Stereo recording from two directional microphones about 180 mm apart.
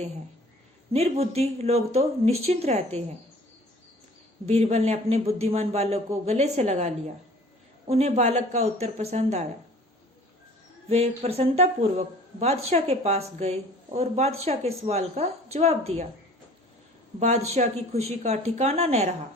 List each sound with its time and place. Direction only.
0.9 s speech: 35° right (ahead or behind)
4.4 s speech: 35° right (ahead or behind)
10.8 s speech: 35° right (ahead or behind)
17.2 s speech: 40° right (ahead or behind)